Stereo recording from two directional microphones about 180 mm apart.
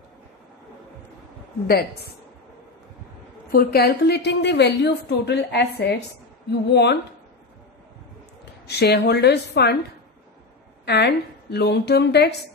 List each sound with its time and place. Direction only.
3.5 s a woman's voice: 60° left (ahead or behind)
8.6 s a woman's voice: 65° left (ahead or behind)
10.9 s a woman's voice: 65° left (ahead or behind)